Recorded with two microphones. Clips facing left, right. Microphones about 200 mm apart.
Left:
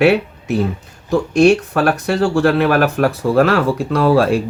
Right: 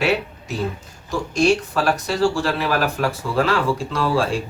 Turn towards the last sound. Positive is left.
turn(degrees=60)  # may be behind; listen again after turning